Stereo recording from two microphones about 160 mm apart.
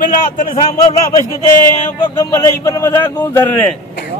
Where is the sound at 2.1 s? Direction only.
20° left (ahead or behind).